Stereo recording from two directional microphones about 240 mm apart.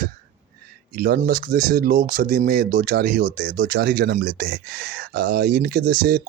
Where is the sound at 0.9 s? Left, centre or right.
Right.